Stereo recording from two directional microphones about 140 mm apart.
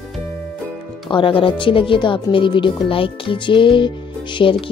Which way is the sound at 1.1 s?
40° left (ahead or behind).